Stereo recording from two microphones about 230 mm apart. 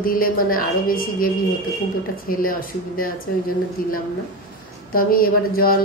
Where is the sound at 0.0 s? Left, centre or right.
Left.